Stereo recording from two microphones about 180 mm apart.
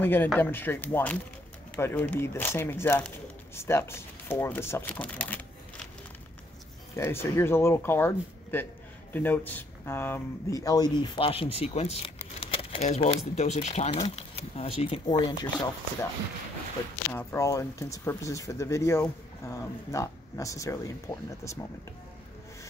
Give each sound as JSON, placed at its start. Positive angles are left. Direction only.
{"t": 0.0, "sound": "speech", "side_deg": 10}
{"t": 7.0, "sound": "speech", "side_deg": 15}
{"t": 17.1, "sound": "speech", "side_deg": 15}